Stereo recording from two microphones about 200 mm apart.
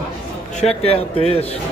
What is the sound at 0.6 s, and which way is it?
Speech, 30° left (ahead or behind).